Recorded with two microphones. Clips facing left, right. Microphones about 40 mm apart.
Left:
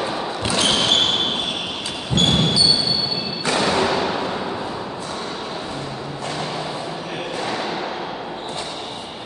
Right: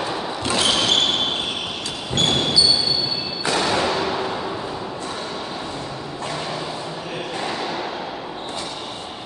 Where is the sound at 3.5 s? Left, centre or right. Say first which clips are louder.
Left 2 dB; centre.